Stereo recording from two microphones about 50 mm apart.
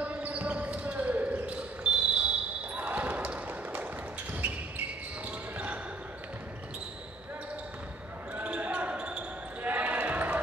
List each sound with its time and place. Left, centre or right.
0.0 s basketball bounce: right
8.5 s basketball bounce: right